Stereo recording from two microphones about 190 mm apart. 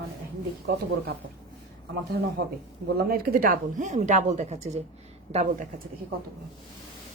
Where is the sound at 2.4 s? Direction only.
55° right (ahead or behind); by 4.8 s 35° right (ahead or behind).